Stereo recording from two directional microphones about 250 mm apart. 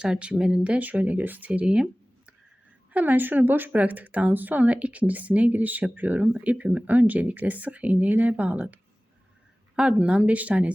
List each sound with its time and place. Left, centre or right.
0.0 s speech: centre